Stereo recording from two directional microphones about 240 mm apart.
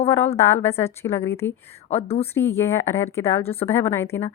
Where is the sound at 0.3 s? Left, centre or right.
Centre.